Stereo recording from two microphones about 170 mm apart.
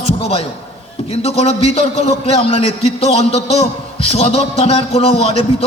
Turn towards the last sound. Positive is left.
turn(degrees=35)  # may be behind; listen again after turning